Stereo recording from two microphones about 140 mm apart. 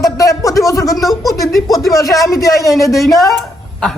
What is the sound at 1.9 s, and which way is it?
Speech, 25° left (ahead or behind).